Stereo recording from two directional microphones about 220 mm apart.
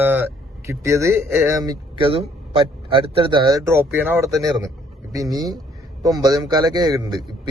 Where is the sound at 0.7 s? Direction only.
15° right (ahead or behind).